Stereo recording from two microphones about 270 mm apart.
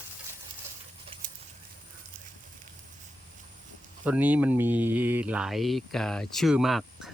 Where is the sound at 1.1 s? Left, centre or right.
Centre.